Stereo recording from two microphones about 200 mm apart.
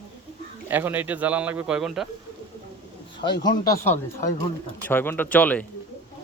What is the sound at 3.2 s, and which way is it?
Speech, 20° left (ahead or behind).